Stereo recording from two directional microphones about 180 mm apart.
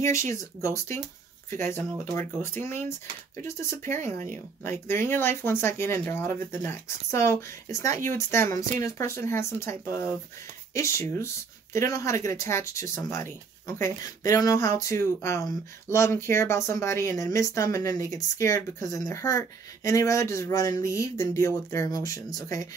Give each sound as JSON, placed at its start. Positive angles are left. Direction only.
{"t": 0.1, "sound": "speech", "side_deg": 15}